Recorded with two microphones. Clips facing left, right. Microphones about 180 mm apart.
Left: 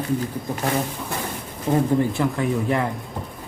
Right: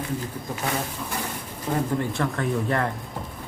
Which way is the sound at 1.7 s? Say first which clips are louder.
Left 6 dB; 30° left (ahead or behind).